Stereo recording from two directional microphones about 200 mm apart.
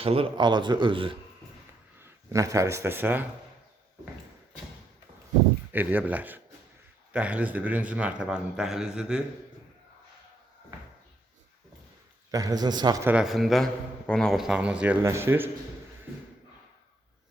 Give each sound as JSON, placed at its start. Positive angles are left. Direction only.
{"t": 0.0, "sound": "speech", "side_deg": -30}
{"t": 2.0, "sound": "speech", "side_deg": -15}
{"t": 5.7, "sound": "a man's voice", "side_deg": -10}
{"t": 12.3, "sound": "speech", "side_deg": -15}
{"t": 13.1, "sound": "speech", "side_deg": -5}